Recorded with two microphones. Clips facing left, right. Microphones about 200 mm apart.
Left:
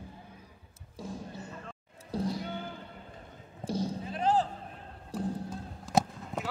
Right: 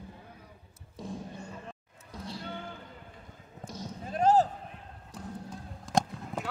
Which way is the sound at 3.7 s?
30° left (ahead or behind).